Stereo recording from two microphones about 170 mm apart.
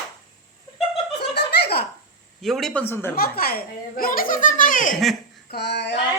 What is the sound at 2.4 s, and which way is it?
Speech, centre (ahead or behind).